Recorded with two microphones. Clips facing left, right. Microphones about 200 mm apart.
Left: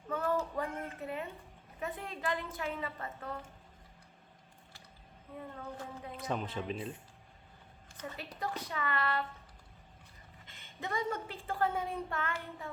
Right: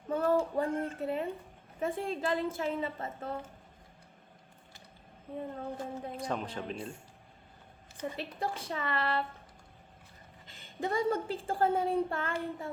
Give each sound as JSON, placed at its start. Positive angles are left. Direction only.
{"t": 0.1, "sound": "a woman's voice", "side_deg": -30}
{"t": 5.4, "sound": "a woman's voice", "side_deg": -30}
{"t": 6.2, "sound": "speech", "side_deg": 0}
{"t": 8.0, "sound": "a woman's voice", "side_deg": -30}
{"t": 10.4, "sound": "a woman's voice", "side_deg": -35}